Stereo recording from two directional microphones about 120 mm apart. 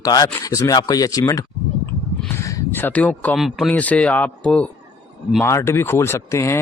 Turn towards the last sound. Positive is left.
turn(degrees=20)  # may be behind; listen again after turning